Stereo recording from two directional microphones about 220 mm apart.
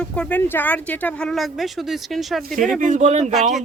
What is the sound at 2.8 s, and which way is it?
Speech, 35° right (ahead or behind).